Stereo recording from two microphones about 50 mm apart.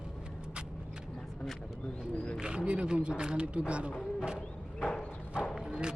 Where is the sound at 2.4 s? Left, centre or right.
Centre.